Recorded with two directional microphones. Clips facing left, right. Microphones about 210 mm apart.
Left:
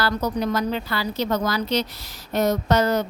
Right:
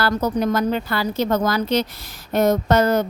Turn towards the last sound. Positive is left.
turn(degrees=-50)  # may be behind; listen again after turning